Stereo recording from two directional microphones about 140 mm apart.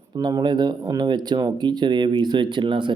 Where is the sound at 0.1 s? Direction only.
30° right (ahead or behind).